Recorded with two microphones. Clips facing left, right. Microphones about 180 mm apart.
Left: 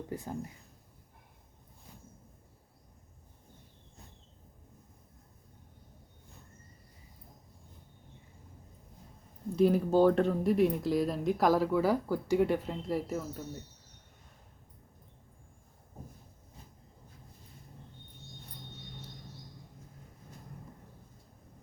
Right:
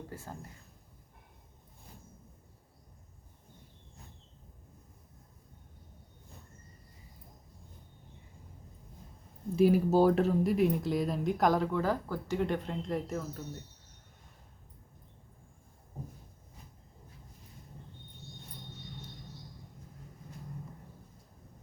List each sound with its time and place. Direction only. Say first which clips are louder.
0.1 s speech: left 6 dB; 15° left (ahead or behind)
9.6 s speech: even; 5° right (ahead or behind)